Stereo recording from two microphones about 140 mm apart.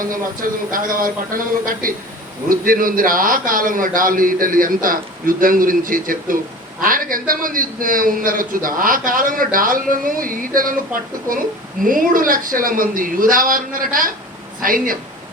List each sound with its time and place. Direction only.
0.0 s a man's voice: 80° right